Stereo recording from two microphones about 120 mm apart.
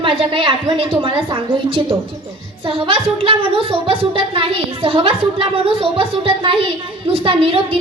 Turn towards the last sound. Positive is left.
turn(degrees=-50)  # may be behind; listen again after turning